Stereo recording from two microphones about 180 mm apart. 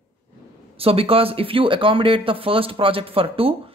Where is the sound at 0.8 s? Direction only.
30° right (ahead or behind).